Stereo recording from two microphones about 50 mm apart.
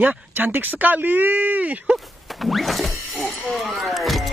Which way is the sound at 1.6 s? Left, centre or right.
Right.